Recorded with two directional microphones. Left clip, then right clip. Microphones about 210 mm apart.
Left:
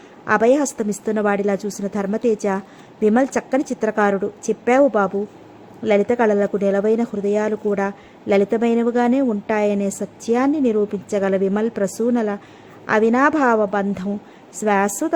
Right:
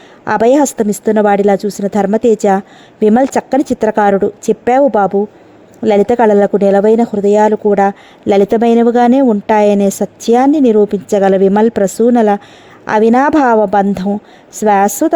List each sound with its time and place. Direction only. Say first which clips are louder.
0.3 s speech: right 6 dB; 40° right (ahead or behind)